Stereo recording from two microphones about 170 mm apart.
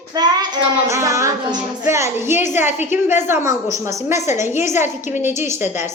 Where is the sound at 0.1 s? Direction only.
25° right (ahead or behind).